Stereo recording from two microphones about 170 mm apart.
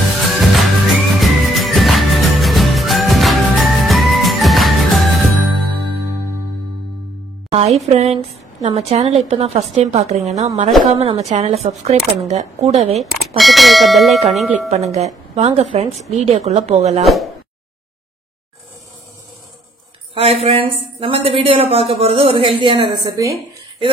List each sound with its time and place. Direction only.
0.2 s music: centre (ahead or behind)
7.5 s speech: 40° right (ahead or behind)
12.9 s speech: centre (ahead or behind)
15.3 s speech: 35° right (ahead or behind)
17.0 s speech: centre (ahead or behind)
20.2 s speech: 35° right (ahead or behind); by 23.4 s 20° right (ahead or behind)